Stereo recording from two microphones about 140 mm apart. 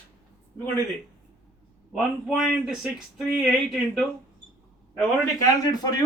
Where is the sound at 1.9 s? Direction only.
Centre (ahead or behind).